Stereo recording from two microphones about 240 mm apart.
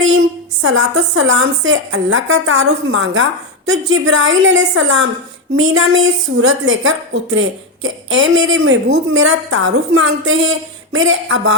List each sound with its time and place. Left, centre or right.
0.1 s a woman's voice: right